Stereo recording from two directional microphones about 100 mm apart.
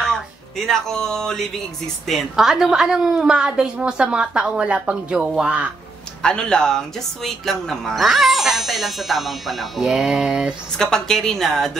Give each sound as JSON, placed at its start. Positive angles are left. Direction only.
{"t": 0.7, "sound": "a woman's voice", "side_deg": 5}
{"t": 6.2, "sound": "speech", "side_deg": 10}
{"t": 10.8, "sound": "speech", "side_deg": 5}